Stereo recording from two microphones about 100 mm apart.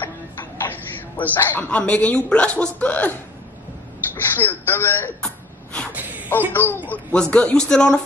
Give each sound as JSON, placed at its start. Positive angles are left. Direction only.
{"t": 0.7, "sound": "a woman's voice", "side_deg": 20}
{"t": 5.2, "sound": "gasp", "side_deg": 10}
{"t": 5.9, "sound": "a sound", "side_deg": -15}
{"t": 6.5, "sound": "speech", "side_deg": 20}
{"t": 6.9, "sound": "a man's voice", "side_deg": 10}